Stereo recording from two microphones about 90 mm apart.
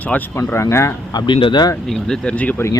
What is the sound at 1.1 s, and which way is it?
Speech, 60° left (ahead or behind).